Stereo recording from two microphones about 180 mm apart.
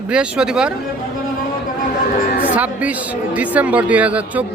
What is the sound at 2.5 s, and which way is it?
Speech, 10° right (ahead or behind).